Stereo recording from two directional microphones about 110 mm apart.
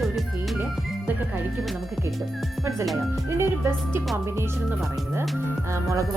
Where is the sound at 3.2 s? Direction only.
20° right (ahead or behind).